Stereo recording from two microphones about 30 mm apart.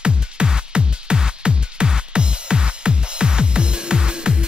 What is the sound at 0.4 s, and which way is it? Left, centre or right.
Music, right.